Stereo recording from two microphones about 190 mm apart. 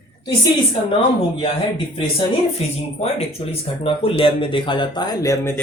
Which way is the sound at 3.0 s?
30° left (ahead or behind).